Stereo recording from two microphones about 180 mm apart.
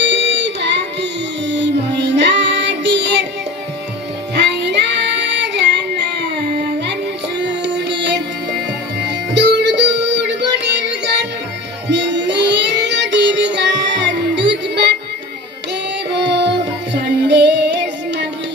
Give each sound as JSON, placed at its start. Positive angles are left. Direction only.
{"t": 0.0, "sound": "music", "side_deg": -75}
{"t": 4.4, "sound": "child singing", "side_deg": -70}
{"t": 6.8, "sound": "music", "side_deg": -70}
{"t": 11.9, "sound": "child singing", "side_deg": -75}
{"t": 16.2, "sound": "child singing", "side_deg": -70}